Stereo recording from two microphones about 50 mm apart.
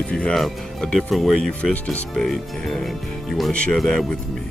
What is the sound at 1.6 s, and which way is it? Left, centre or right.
Speech, left.